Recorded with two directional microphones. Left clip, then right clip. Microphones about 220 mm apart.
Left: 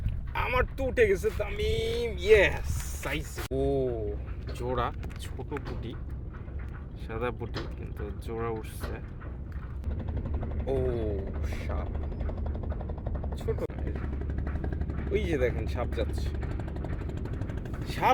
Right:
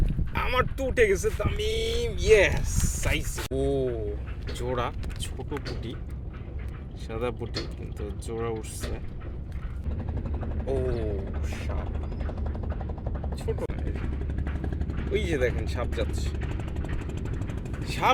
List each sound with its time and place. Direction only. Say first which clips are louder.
0.3 s speech: right 2 dB; centre (ahead or behind)
5.4 s speech: right 1 dB; 10° right (ahead or behind)
7.1 s speech: right 2 dB; 5° right (ahead or behind)
10.8 s mechanisms: even; 20° left (ahead or behind)
13.6 s a sound: right 1 dB; 5° left (ahead or behind)
15.1 s speech: right 2 dB; 5° left (ahead or behind)
17.8 s speech: right 1 dB; 10° left (ahead or behind)